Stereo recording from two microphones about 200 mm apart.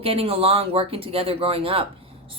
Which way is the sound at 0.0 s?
30° right (ahead or behind).